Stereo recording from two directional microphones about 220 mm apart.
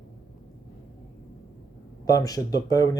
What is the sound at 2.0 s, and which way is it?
Speech, 15° left (ahead or behind).